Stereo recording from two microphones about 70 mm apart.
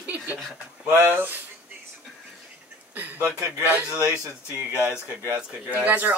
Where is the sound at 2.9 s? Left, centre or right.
Right.